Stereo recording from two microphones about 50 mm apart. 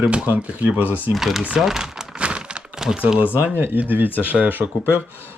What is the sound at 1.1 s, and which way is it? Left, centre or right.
Speech, centre.